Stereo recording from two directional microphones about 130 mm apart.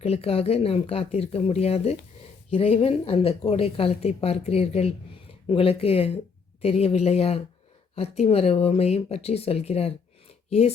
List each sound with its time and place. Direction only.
0.0 s a woman's voice: 50° left (ahead or behind)